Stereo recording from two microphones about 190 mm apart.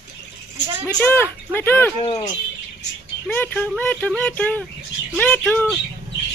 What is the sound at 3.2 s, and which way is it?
Speech, 10° left (ahead or behind).